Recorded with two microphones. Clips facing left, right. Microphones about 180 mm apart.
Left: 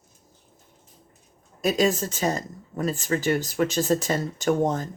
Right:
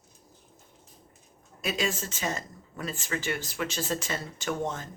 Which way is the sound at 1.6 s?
40° left (ahead or behind).